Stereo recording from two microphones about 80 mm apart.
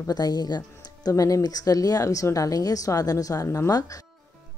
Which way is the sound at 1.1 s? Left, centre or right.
Left.